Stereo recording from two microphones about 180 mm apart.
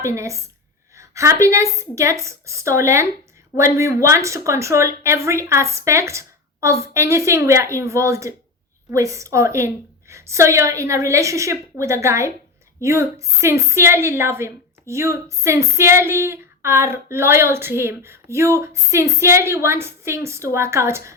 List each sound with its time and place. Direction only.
0.0 s a woman's voice: 15° right (ahead or behind)